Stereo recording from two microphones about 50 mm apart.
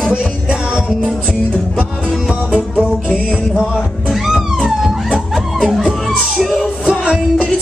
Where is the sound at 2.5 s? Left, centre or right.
Right.